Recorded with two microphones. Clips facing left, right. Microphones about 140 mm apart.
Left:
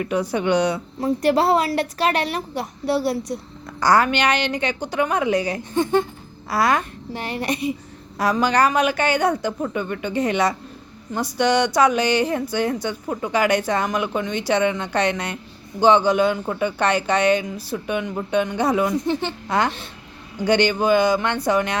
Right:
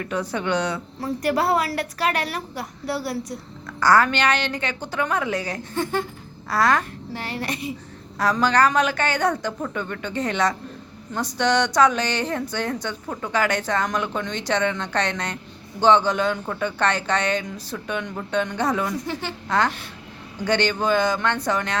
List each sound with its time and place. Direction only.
0.0 s speech: 10° left (ahead or behind)
1.2 s a woman's voice: 25° left (ahead or behind)